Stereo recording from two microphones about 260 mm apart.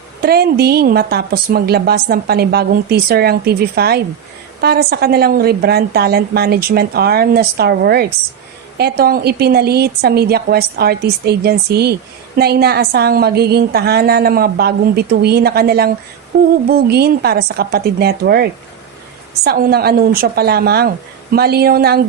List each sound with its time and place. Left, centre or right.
0.2 s a woman's voice: right
19.5 s a woman's voice: right